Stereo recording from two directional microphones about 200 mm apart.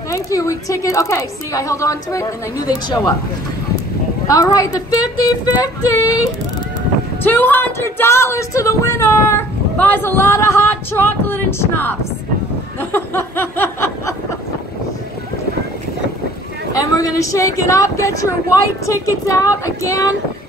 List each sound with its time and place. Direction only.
0.1 s speech: 15° left (ahead or behind)
4.3 s speech: 15° left (ahead or behind)
7.2 s speech: 10° left (ahead or behind)
12.9 s a sound: 10° left (ahead or behind)
16.9 s speech: 15° left (ahead or behind)